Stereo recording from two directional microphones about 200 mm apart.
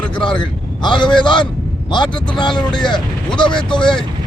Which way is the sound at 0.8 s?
20° left (ahead or behind).